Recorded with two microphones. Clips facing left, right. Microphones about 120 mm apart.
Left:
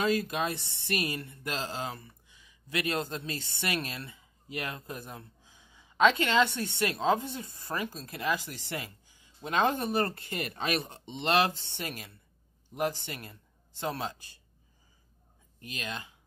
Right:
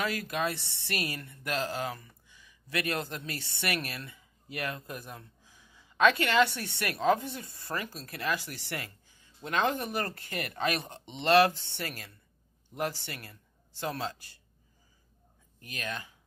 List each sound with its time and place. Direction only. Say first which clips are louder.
0.0 s speech: left 3 dB; 25° left (ahead or behind)
15.6 s speech: right 1 dB; 20° left (ahead or behind)